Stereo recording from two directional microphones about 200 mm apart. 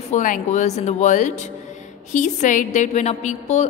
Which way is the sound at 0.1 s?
40° left (ahead or behind).